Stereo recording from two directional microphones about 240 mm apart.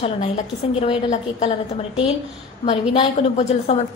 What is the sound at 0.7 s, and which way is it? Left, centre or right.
Speech, left.